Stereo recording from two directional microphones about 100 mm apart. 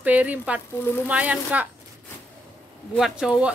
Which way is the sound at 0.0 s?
15° right (ahead or behind).